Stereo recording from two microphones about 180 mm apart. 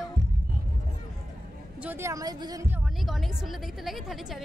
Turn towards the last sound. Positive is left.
turn(degrees=0)  # may be behind; listen again after turning